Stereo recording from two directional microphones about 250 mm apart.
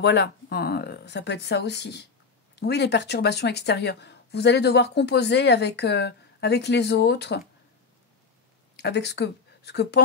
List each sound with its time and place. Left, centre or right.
0.0 s a woman's voice: left
8.7 s speech: left